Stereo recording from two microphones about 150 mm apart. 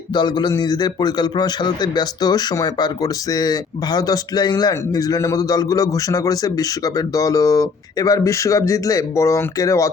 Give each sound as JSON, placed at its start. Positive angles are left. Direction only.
{"t": 0.1, "sound": "a man's voice", "side_deg": 30}